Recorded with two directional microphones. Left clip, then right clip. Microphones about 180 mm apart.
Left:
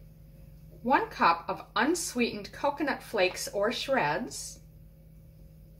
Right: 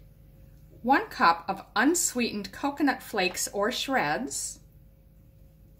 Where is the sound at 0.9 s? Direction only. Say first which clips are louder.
Right 2 dB; 65° right (ahead or behind).